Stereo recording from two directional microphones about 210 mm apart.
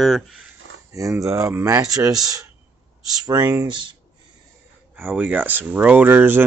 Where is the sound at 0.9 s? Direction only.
15° right (ahead or behind).